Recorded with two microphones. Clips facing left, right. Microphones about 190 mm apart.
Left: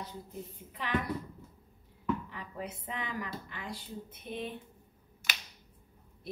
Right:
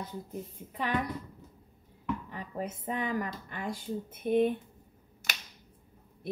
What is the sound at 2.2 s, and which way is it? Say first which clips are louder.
Speech: right 4 dB; 45° right (ahead or behind).